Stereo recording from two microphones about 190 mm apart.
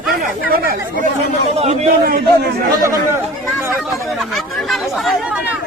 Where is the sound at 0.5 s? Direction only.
50° right (ahead or behind).